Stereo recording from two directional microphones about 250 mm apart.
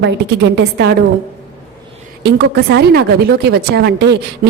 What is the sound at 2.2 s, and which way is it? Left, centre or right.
A woman's voice, right.